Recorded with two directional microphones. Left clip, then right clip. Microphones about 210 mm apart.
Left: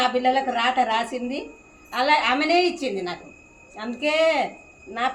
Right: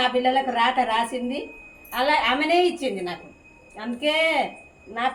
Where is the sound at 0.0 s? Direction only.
15° left (ahead or behind).